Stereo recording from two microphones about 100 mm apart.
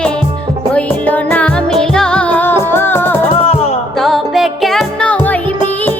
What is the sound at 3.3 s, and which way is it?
Music, 75° left (ahead or behind).